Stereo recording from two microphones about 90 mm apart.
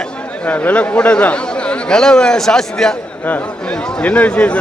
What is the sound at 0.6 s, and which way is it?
Speech, 15° left (ahead or behind).